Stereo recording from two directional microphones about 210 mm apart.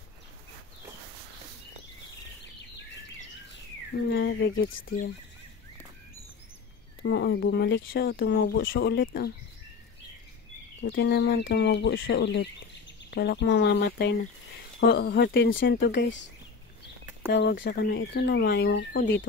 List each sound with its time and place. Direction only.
4.1 s speech: 55° left (ahead or behind)
7.0 s speech: 50° left (ahead or behind)
10.8 s speech: 60° left (ahead or behind)